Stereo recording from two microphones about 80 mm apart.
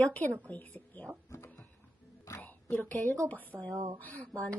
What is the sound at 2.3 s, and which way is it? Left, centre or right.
Whispering, left.